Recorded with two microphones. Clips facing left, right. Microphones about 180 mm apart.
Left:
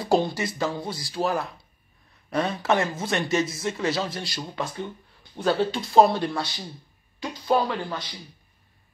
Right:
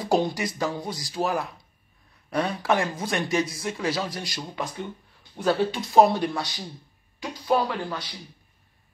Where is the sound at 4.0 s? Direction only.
15° right (ahead or behind).